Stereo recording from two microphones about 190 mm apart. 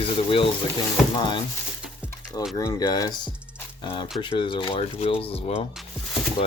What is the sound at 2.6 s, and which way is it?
Speech, 20° left (ahead or behind).